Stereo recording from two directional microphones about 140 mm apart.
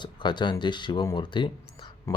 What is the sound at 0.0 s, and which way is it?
Speech, 35° left (ahead or behind).